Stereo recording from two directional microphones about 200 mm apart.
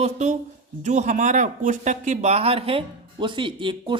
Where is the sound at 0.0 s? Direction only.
35° right (ahead or behind).